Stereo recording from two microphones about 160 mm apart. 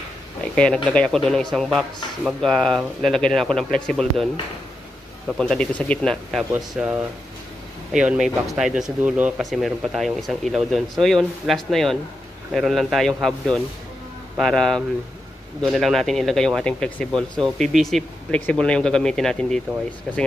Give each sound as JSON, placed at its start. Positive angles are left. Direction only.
{"t": 0.8, "sound": "speech", "side_deg": 5}
{"t": 5.4, "sound": "speech", "side_deg": 5}
{"t": 6.5, "sound": "speech", "side_deg": -5}